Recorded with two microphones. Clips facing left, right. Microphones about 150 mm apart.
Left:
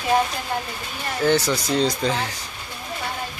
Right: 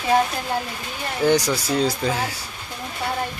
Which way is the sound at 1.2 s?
15° right (ahead or behind).